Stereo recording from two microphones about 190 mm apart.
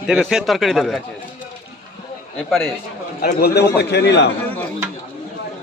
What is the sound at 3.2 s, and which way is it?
A man's voice, 50° left (ahead or behind).